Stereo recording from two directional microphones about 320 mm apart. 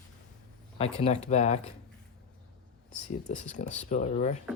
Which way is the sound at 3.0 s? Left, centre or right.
Left.